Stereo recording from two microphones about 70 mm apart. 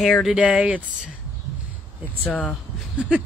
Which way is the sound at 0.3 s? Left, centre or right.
Centre.